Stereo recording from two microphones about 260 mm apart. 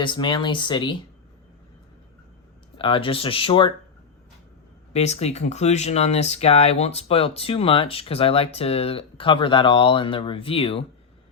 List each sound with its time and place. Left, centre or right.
0.0 s speech: centre
2.7 s speech: centre
4.9 s speech: left